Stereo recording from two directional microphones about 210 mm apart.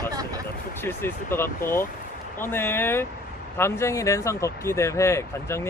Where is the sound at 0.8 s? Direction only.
10° left (ahead or behind).